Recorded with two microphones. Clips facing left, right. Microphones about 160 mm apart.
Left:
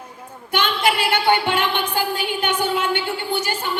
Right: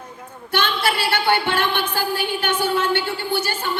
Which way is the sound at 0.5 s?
15° left (ahead or behind).